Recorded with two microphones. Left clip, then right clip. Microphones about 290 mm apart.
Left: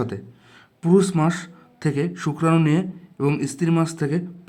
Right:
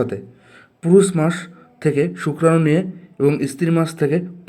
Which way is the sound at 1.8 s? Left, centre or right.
Left.